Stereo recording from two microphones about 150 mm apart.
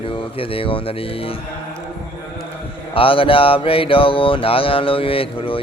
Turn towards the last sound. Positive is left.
turn(degrees=40)  # may be behind; listen again after turning